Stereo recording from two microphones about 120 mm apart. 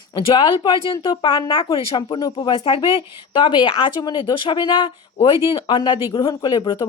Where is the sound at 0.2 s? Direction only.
45° left (ahead or behind).